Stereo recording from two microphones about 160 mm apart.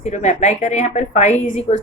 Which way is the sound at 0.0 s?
45° left (ahead or behind).